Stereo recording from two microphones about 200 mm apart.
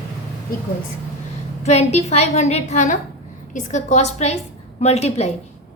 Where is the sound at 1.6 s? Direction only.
35° left (ahead or behind).